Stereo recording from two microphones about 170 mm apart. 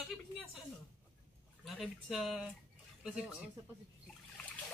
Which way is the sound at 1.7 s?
Centre (ahead or behind).